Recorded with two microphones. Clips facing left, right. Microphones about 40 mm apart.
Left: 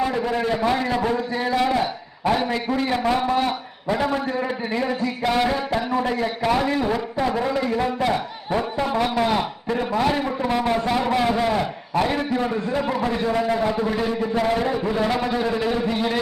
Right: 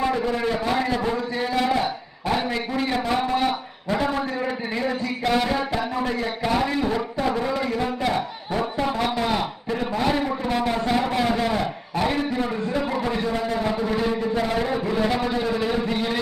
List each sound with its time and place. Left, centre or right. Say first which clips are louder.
0.1 s a man's voice: left 1 dB; centre
0.9 s a man's voice: left 2 dB; centre
2.4 s music: left 3 dB; centre
4.8 s music: left 1 dB; centre
8.5 s a man's voice: left 2 dB; centre
9.2 s music: left 2 dB; centre
10.2 s a man's voice: left 1 dB; centre
12.9 s a man's voice: left 2 dB; centre
13.3 s music: left 3 dB; centre
14.7 s a man's voice: left 1 dB; centre